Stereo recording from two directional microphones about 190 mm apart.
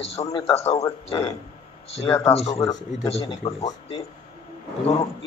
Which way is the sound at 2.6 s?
20° left (ahead or behind).